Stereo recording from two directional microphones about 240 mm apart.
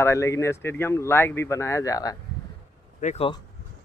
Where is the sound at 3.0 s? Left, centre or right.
Left.